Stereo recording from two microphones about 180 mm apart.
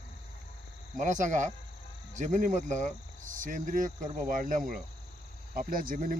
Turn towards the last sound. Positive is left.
turn(degrees=-50)  # may be behind; listen again after turning